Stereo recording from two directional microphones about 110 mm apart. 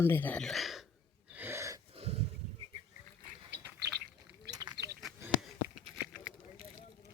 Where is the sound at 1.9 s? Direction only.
65° right (ahead or behind).